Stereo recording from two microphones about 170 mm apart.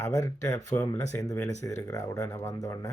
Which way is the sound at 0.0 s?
20° left (ahead or behind).